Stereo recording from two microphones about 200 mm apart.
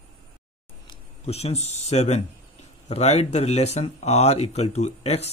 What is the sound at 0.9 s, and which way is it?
Speech, 30° left (ahead or behind).